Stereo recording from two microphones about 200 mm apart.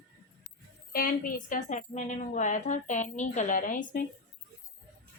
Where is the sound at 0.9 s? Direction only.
45° left (ahead or behind).